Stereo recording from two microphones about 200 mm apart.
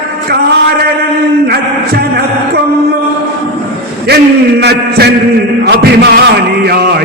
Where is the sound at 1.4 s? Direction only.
50° right (ahead or behind).